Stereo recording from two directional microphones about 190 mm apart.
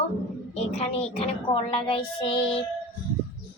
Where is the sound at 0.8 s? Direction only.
30° left (ahead or behind).